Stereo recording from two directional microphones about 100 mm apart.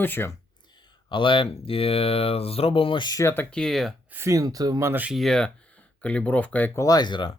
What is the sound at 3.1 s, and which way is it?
Speech, 35° left (ahead or behind).